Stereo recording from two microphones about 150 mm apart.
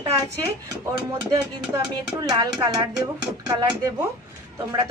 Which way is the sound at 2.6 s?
30° right (ahead or behind).